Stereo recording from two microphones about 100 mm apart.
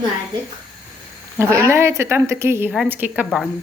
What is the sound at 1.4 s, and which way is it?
A woman's voice, 25° right (ahead or behind).